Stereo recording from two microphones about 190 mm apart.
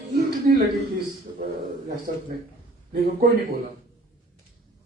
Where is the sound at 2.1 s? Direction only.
45° right (ahead or behind).